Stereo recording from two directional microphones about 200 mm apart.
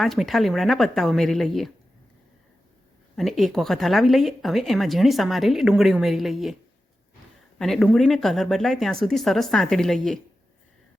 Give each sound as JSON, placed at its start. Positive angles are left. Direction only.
{"t": 0.0, "sound": "speech", "side_deg": 0}
{"t": 3.2, "sound": "speech", "side_deg": 0}
{"t": 7.6, "sound": "speech", "side_deg": 0}